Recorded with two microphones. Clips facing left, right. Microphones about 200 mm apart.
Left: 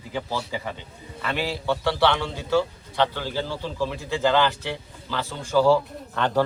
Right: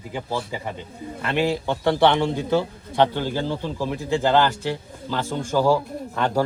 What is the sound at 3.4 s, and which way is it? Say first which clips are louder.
Speech: right 2 dB; 20° right (ahead or behind).